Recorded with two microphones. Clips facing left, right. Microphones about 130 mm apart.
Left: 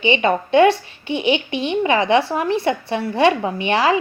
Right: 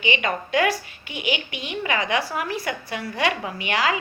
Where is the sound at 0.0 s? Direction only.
30° left (ahead or behind).